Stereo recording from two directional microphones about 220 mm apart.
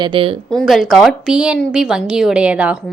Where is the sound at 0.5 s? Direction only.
Centre (ahead or behind).